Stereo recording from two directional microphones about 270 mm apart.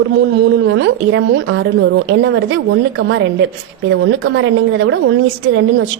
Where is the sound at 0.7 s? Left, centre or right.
Right.